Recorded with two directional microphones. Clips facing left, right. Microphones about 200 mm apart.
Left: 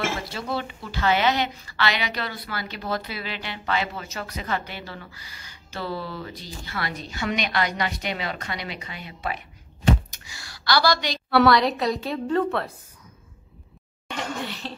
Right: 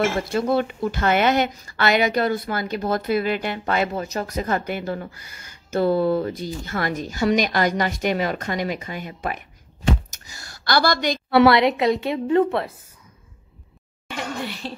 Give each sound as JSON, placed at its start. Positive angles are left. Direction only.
{"t": 0.3, "sound": "speech", "side_deg": -50}
{"t": 10.1, "sound": "a sound", "side_deg": -45}
{"t": 11.4, "sound": "a woman's voice", "side_deg": -25}
{"t": 14.0, "sound": "speech", "side_deg": -10}